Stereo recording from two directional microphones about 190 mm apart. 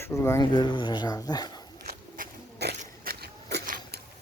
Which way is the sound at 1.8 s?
50° right (ahead or behind).